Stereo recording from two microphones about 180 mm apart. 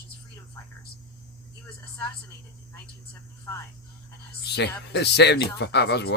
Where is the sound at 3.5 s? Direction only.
15° left (ahead or behind).